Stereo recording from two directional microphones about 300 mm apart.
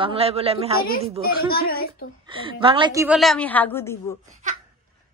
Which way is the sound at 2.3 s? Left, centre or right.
Centre.